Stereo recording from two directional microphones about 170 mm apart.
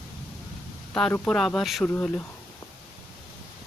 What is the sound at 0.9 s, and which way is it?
Speech, 5° left (ahead or behind).